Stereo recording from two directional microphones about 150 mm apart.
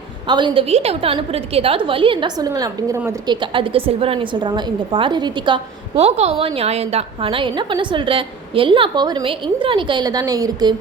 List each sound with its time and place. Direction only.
0.3 s a woman's voice: 30° right (ahead or behind)
0.7 s a woman's voice: 45° right (ahead or behind); by 3.0 s 20° right (ahead or behind)
3.2 s a woman's voice: 35° right (ahead or behind)
6.0 s a woman's voice: 45° right (ahead or behind); by 10.8 s 25° right (ahead or behind)